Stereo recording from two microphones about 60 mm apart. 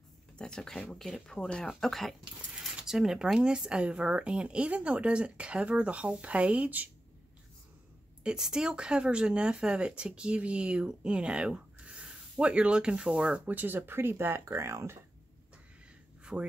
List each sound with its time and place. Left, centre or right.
0.4 s speech: centre
2.8 s speech: centre; by 6.9 s right
8.2 s speech: centre
13.5 s speech: right
16.3 s speech: right